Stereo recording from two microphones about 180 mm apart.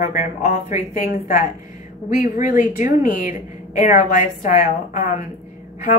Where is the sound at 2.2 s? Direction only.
20° right (ahead or behind).